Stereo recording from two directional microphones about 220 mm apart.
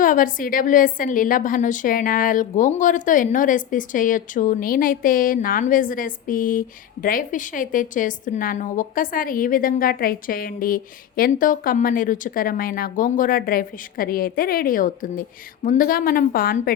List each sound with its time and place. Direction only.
0.0 s a woman's voice: 35° left (ahead or behind)